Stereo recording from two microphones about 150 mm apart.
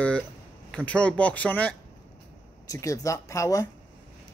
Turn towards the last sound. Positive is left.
turn(degrees=20)  # may be behind; listen again after turning